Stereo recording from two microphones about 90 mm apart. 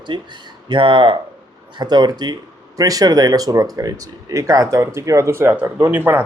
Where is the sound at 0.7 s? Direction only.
70° right (ahead or behind).